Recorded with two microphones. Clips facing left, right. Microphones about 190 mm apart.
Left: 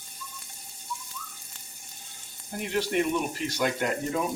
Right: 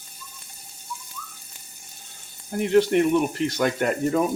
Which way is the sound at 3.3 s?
60° right (ahead or behind).